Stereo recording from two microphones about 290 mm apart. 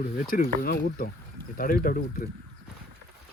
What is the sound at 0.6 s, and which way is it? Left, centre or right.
Speech, left.